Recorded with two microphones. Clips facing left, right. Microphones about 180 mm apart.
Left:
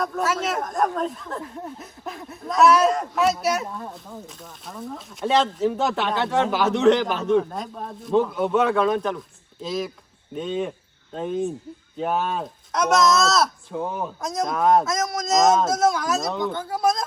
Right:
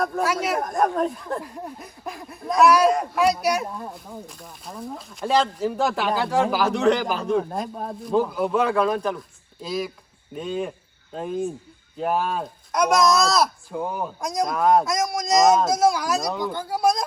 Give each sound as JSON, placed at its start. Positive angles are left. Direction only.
{"t": 0.3, "sound": "speech", "side_deg": 0}